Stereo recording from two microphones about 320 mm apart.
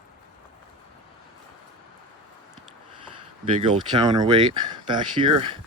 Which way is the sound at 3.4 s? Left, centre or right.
Centre.